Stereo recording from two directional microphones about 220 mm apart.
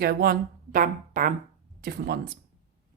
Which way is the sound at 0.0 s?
45° right (ahead or behind).